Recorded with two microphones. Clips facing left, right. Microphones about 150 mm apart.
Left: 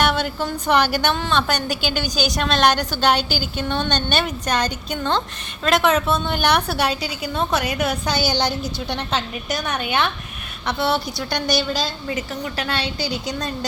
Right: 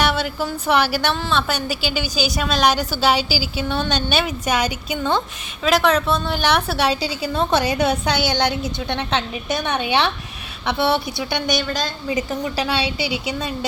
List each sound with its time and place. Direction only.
0.0 s a woman's voice: 5° right (ahead or behind)
7.0 s a woman's voice: 30° right (ahead or behind)
8.1 s a woman's voice: 60° right (ahead or behind)
9.5 s a woman's voice: 25° right (ahead or behind)
11.2 s a woman's voice: centre (ahead or behind)
12.0 s a woman's voice: 15° right (ahead or behind)
13.1 s a woman's voice: 5° right (ahead or behind)